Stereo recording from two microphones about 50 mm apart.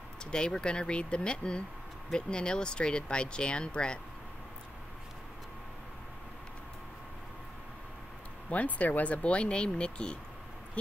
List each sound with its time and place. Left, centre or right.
0.2 s speech: centre
8.5 s speech: left